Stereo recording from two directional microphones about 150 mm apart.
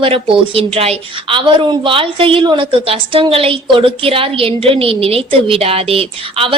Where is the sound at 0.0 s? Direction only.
40° right (ahead or behind).